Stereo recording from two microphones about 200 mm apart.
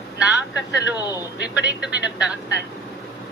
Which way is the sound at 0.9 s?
20° left (ahead or behind).